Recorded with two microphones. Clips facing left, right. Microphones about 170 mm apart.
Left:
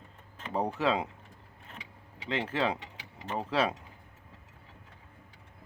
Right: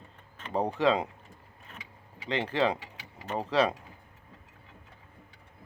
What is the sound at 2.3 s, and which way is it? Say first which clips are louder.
Speech: right 3 dB; 5° left (ahead or behind).